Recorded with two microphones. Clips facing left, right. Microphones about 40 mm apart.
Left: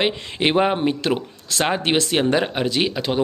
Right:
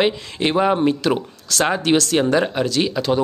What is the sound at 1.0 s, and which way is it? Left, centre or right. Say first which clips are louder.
Speech: right 2 dB; centre.